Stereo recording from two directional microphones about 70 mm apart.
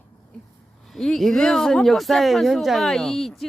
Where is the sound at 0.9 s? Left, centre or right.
Centre.